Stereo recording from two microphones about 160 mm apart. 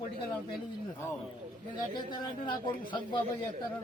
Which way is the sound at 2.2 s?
30° left (ahead or behind).